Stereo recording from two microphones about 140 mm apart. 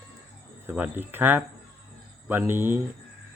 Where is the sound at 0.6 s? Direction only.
10° right (ahead or behind).